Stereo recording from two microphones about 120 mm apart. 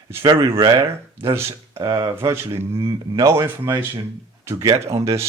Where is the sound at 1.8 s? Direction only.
35° right (ahead or behind).